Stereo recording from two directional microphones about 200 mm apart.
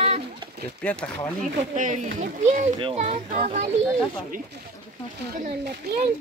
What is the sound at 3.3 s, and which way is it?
Speech, 40° right (ahead or behind).